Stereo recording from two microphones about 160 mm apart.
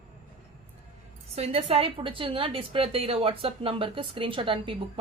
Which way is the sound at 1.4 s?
35° right (ahead or behind).